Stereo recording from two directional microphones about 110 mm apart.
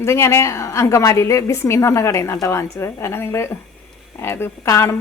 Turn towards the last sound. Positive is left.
turn(degrees=25)  # may be behind; listen again after turning